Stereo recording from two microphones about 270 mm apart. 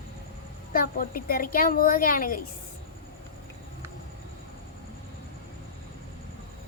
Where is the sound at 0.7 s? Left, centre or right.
Left.